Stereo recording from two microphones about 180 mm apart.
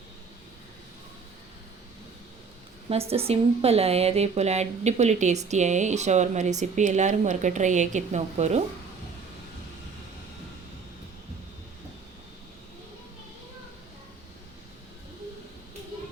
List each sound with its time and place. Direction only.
2.9 s a woman's voice: 35° right (ahead or behind)